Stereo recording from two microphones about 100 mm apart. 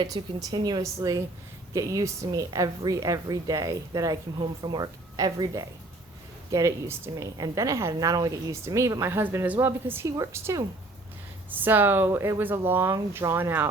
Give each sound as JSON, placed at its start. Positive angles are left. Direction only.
{"t": 0.0, "sound": "a woman's voice", "side_deg": -40}
{"t": 4.4, "sound": "a woman's voice", "side_deg": -50}
{"t": 7.9, "sound": "a woman's voice", "side_deg": -40}
{"t": 11.5, "sound": "speech", "side_deg": -20}